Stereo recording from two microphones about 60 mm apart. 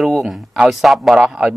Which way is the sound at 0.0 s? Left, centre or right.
Centre.